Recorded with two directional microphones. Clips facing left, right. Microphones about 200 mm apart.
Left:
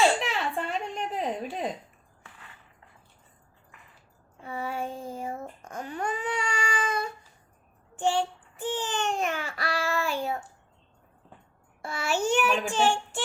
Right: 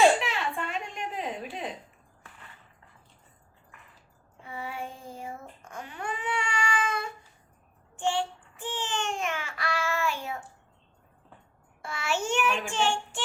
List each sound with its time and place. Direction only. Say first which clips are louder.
0.2 s a sound: left 2 dB; 40° left (ahead or behind)
4.4 s a child's voice: left 5 dB; 40° left (ahead or behind)
11.8 s child singing: left 3 dB; 35° left (ahead or behind)